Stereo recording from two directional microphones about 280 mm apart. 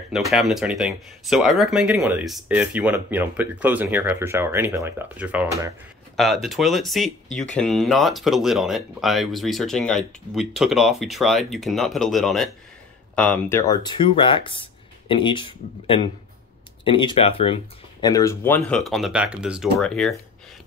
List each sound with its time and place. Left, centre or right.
0.1 s speech: centre